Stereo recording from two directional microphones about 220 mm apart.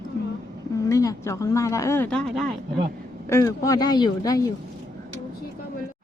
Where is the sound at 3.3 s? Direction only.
10° left (ahead or behind).